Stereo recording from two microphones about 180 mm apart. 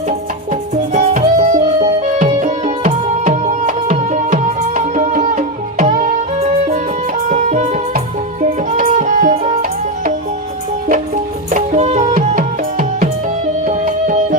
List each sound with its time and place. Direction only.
0.9 s music: 45° right (ahead or behind)
2.1 s tabla: 35° right (ahead or behind)
3.2 s music: 45° right (ahead or behind)
7.3 s music: 45° right (ahead or behind)
11.5 s music: 40° right (ahead or behind)
13.7 s music: 40° right (ahead or behind)